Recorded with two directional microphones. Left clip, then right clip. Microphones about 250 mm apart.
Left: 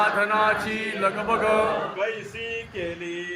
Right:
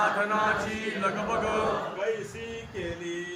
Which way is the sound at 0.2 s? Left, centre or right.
Left.